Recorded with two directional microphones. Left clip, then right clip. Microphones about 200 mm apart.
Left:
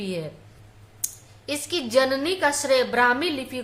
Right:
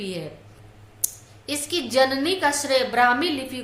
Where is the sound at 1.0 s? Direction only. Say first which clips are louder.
Even; 15° left (ahead or behind).